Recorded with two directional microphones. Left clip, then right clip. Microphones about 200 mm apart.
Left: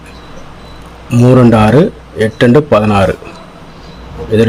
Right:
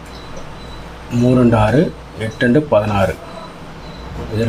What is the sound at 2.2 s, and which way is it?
Speech, 60° left (ahead or behind).